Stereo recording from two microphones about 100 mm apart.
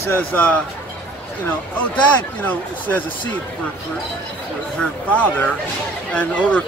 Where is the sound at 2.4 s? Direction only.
15° left (ahead or behind).